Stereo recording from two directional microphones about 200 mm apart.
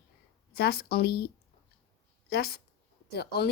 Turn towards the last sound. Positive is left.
turn(degrees=50)  # may be behind; listen again after turning